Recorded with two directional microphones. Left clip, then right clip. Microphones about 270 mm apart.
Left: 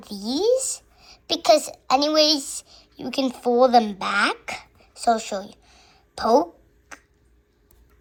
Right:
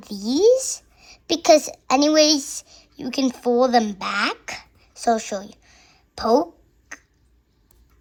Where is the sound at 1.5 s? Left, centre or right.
Right.